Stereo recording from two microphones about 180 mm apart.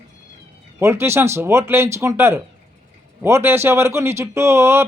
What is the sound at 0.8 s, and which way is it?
Speech, 15° right (ahead or behind).